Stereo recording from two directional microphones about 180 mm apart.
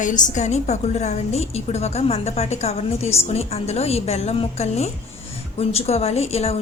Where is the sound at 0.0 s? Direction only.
45° left (ahead or behind).